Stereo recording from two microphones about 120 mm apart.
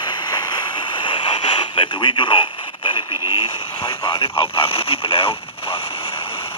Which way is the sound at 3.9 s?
40° left (ahead or behind).